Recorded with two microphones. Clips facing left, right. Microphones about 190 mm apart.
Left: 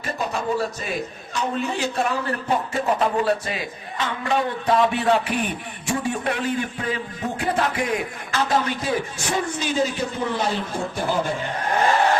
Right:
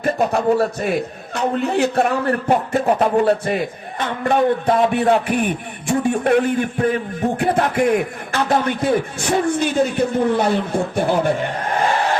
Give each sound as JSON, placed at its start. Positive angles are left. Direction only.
{"t": 0.0, "sound": "a man's voice", "side_deg": -60}